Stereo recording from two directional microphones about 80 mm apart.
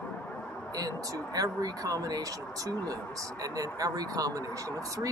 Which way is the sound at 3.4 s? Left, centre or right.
Right.